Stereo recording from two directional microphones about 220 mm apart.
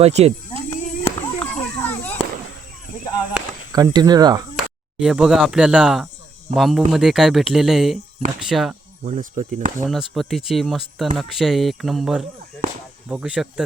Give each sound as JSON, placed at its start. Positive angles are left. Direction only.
{"t": 0.0, "sound": "speech", "side_deg": -30}
{"t": 0.7, "sound": "children playing", "side_deg": 10}
{"t": 3.7, "sound": "speech", "side_deg": -15}
{"t": 4.5, "sound": "speech", "side_deg": -5}
{"t": 9.0, "sound": "speech", "side_deg": -35}
{"t": 9.8, "sound": "speech", "side_deg": 0}